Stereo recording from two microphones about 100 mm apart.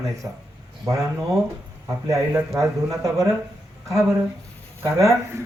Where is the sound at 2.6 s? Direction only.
35° right (ahead or behind).